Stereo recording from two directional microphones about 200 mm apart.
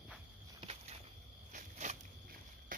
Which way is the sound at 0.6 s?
35° right (ahead or behind).